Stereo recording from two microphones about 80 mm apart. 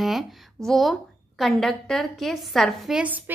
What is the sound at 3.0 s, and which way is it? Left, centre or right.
Speech, right.